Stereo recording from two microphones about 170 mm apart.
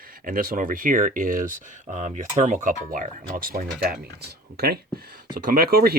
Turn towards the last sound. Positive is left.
turn(degrees=-65)  # may be behind; listen again after turning